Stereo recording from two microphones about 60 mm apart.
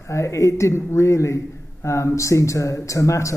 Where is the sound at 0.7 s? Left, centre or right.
Left.